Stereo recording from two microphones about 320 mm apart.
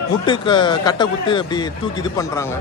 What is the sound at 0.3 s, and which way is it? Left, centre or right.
Speech, centre.